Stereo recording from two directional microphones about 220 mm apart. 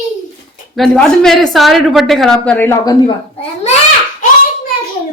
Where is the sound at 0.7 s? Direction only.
Centre (ahead or behind).